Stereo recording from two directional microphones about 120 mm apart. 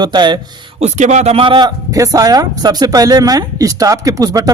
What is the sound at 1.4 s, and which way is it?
Speech, 45° right (ahead or behind).